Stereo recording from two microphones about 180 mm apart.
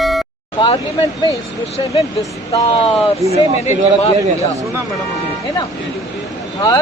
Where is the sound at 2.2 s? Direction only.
20° left (ahead or behind).